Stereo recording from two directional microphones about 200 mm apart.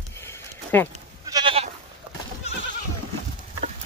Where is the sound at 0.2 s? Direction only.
10° left (ahead or behind).